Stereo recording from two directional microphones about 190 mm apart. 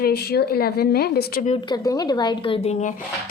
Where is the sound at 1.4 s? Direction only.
25° left (ahead or behind).